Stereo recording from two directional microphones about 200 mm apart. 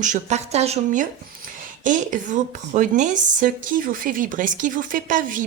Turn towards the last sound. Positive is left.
turn(degrees=-40)  # may be behind; listen again after turning